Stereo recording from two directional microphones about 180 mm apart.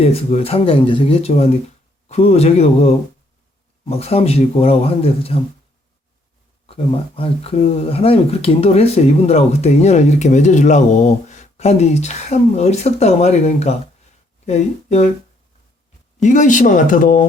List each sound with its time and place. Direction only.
0.0 s speech: 35° left (ahead or behind)
6.7 s speech: 35° left (ahead or behind)
16.2 s speech: 45° left (ahead or behind)